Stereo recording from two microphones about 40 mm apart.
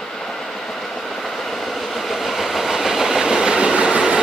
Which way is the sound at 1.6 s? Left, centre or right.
Centre.